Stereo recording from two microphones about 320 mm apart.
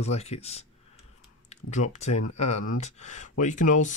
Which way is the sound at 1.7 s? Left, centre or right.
Left.